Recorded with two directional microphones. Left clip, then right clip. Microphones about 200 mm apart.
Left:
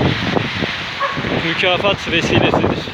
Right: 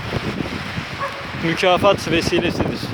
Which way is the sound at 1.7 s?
25° right (ahead or behind).